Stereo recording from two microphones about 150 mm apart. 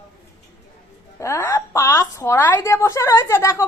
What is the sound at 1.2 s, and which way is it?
A woman's voice, 20° left (ahead or behind).